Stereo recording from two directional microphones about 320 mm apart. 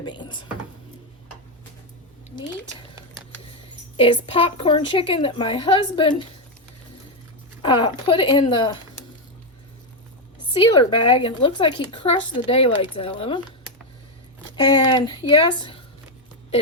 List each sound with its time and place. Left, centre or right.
0.0 s a woman's voice: centre
3.5 s a woman's voice: centre
7.6 s a woman's voice: centre
10.5 s a woman's voice: centre
14.5 s a woman's voice: centre